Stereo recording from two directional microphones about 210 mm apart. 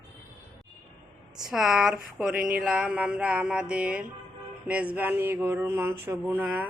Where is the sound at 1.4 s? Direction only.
Centre (ahead or behind).